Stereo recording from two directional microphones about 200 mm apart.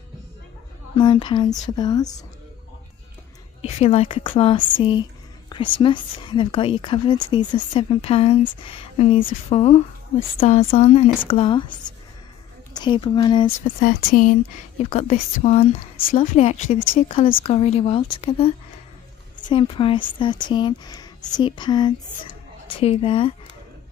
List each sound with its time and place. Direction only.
0.9 s a woman's voice: 25° left (ahead or behind)
3.6 s a woman's voice: 30° left (ahead or behind)
12.7 s a woman's voice: 20° left (ahead or behind)
13.7 s a woman's voice: 45° left (ahead or behind); by 23.3 s 25° left (ahead or behind)